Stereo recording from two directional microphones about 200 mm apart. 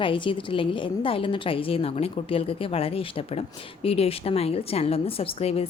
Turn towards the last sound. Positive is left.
turn(degrees=30)  # may be behind; listen again after turning